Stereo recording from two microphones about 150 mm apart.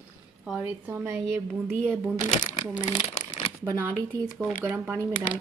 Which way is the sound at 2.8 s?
50° left (ahead or behind).